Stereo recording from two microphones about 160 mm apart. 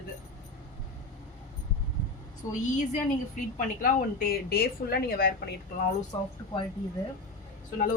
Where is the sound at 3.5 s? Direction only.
60° left (ahead or behind).